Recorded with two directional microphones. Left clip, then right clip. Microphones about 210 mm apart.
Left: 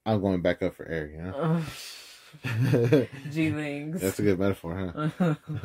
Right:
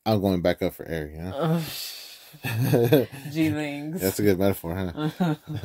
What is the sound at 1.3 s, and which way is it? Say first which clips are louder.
Speech: right 3 dB; 5° right (ahead or behind).